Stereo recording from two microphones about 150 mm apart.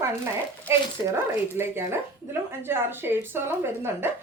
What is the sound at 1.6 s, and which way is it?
A woman's voice, 15° right (ahead or behind).